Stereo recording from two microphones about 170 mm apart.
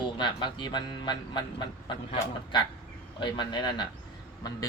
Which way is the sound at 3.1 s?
25° left (ahead or behind).